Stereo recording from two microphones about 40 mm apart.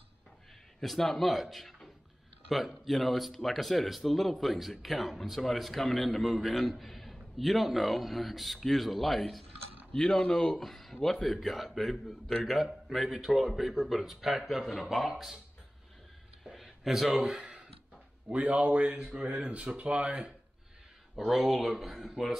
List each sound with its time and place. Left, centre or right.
0.8 s speech: centre
9.9 s speech: centre
10.6 s speech: centre
16.6 s a sound: centre
17.1 s a man's voice: right
21.2 s speech: centre